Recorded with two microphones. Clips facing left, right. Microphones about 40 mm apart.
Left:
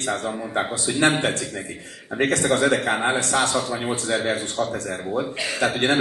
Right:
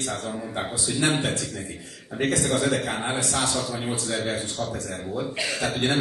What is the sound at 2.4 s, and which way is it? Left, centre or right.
A man's voice, left.